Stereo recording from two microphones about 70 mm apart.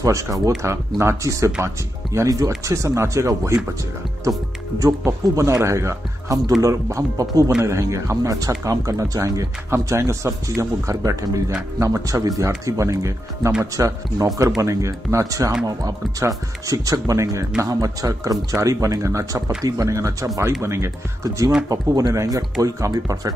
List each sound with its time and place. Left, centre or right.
0.0 s speech: right
0.6 s speech: right
5.0 s speech: right
9.7 s speech: right
15.6 s speech: right
21.6 s speech: right